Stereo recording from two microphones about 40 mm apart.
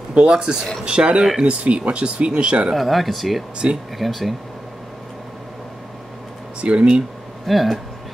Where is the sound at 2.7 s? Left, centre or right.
Centre.